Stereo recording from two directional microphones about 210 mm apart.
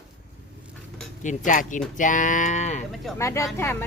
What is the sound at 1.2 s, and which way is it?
Speech, 35° left (ahead or behind).